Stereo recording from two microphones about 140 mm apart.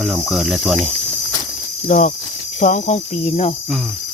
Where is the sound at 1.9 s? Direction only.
65° left (ahead or behind).